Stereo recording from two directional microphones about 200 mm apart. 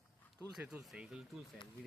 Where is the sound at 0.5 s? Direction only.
5° right (ahead or behind).